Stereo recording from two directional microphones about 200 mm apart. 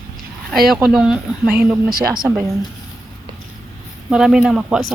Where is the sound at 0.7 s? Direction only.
Centre (ahead or behind).